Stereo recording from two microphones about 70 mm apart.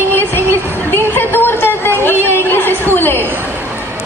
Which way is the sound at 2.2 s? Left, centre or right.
Left.